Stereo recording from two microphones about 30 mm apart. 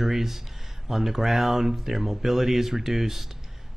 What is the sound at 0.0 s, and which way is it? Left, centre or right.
Speech, centre.